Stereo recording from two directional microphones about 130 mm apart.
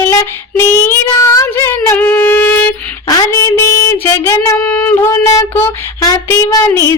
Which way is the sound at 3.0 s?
25° left (ahead or behind).